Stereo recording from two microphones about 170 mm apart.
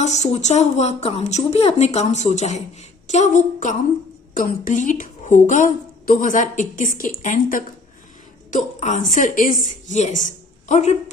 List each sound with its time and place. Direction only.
0.0 s a woman's voice: 40° left (ahead or behind)